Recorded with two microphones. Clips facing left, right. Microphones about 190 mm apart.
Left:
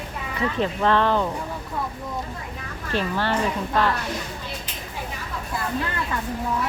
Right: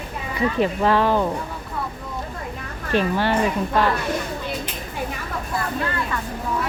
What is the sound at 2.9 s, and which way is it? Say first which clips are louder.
Speech: right 4 dB; 15° right (ahead or behind).